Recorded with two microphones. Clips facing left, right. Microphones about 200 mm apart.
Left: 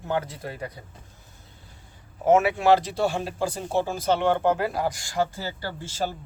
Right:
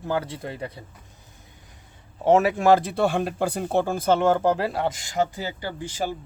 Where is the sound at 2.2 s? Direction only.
35° right (ahead or behind).